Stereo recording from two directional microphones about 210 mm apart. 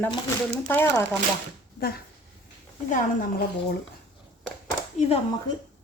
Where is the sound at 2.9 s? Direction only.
40° left (ahead or behind).